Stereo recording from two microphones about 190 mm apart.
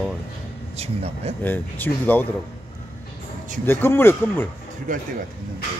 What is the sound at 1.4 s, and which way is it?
Speech, 10° left (ahead or behind).